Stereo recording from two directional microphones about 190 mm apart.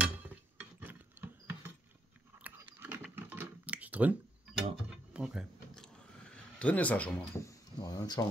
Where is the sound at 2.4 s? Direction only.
10° right (ahead or behind).